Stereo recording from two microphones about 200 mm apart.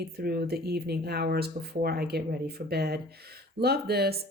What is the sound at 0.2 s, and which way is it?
Speech, 50° right (ahead or behind).